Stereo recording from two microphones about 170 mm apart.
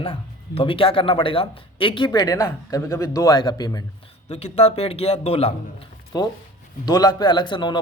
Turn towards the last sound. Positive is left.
turn(degrees=25)  # may be behind; listen again after turning